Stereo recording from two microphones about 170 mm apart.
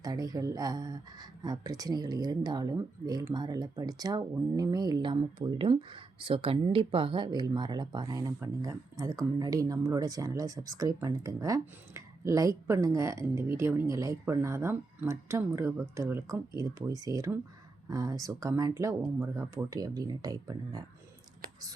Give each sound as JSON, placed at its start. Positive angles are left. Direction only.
{"t": 0.0, "sound": "speech", "side_deg": -20}